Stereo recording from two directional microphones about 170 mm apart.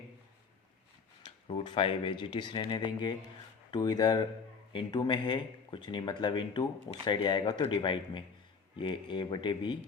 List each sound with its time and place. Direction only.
1.2 s speech: 30° left (ahead or behind)